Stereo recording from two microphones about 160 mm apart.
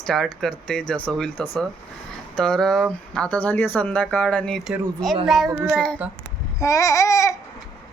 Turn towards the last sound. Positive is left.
turn(degrees=20)  # may be behind; listen again after turning